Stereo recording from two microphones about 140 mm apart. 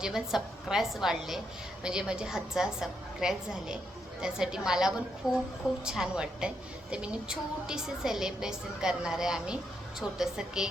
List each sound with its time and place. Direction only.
0.0 s a woman's voice: centre (ahead or behind)